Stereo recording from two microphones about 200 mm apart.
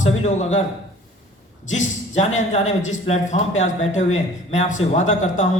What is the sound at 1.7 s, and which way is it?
Speech, 35° left (ahead or behind).